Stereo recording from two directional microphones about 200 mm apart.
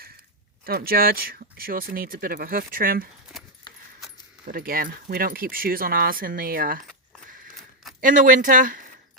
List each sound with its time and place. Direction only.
0.6 s speech: 50° right (ahead or behind)
4.4 s speech: 45° right (ahead or behind)
8.0 s speech: 40° right (ahead or behind)